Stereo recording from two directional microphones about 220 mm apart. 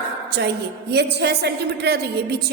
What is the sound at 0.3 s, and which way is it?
A woman's voice, 50° right (ahead or behind).